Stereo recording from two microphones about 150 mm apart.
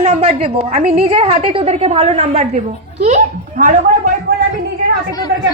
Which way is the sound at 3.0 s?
55° right (ahead or behind).